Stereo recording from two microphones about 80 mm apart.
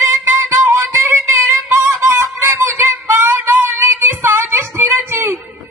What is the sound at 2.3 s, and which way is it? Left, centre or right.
Music, right.